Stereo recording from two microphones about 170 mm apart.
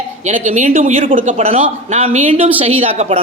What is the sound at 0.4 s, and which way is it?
Speech, 45° right (ahead or behind).